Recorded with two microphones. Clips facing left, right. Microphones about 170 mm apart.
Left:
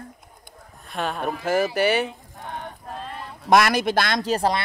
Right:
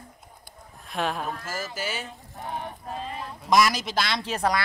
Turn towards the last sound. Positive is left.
turn(degrees=30)  # may be behind; listen again after turning